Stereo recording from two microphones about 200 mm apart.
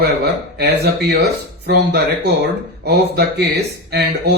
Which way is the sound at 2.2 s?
55° right (ahead or behind).